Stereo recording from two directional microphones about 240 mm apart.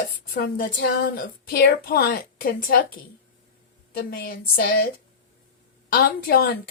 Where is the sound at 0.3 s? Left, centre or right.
Left.